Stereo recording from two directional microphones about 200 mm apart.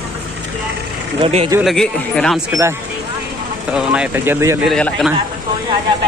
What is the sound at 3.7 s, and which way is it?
Speech, 5° right (ahead or behind).